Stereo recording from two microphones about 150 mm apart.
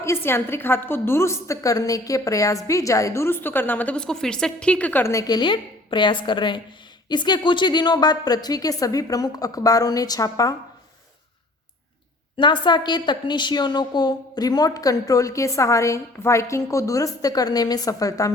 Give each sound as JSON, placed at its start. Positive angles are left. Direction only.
{"t": 0.0, "sound": "a woman's voice", "side_deg": 15}
{"t": 12.4, "sound": "a woman's voice", "side_deg": 30}